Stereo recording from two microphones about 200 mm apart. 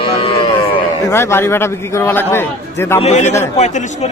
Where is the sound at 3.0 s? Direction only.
35° left (ahead or behind).